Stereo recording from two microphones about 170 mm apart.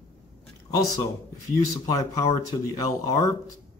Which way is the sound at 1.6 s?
20° left (ahead or behind).